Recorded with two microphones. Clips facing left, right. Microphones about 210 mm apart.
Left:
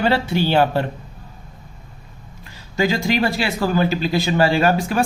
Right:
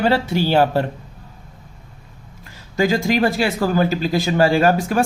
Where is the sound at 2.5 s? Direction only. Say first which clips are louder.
Right 2 dB; 45° right (ahead or behind).